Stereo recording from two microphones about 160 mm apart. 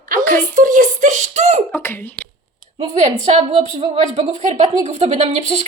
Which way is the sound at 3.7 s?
40° right (ahead or behind).